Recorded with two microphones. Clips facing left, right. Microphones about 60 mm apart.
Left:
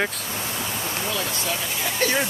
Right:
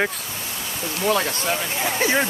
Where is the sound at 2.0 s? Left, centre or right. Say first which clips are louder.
Right 2 dB; centre.